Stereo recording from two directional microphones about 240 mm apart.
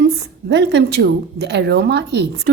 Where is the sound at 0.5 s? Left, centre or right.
Right.